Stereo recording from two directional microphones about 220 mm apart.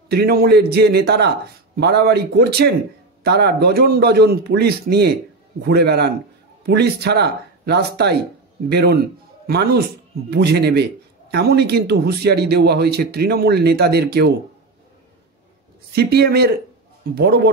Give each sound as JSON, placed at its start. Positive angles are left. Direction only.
{"t": 0.1, "sound": "a man's voice", "side_deg": -45}
{"t": 15.9, "sound": "a man's voice", "side_deg": -45}